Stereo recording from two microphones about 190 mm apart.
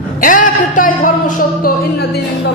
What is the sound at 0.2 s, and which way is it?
A woman's voice, 45° left (ahead or behind).